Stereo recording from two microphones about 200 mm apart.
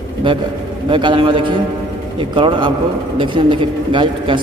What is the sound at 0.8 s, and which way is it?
A man's voice, 25° right (ahead or behind).